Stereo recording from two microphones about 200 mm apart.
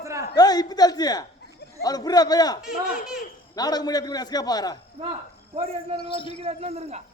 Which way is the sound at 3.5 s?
20° left (ahead or behind).